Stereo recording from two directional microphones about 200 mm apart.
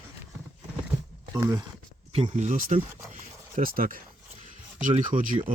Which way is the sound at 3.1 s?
40° right (ahead or behind).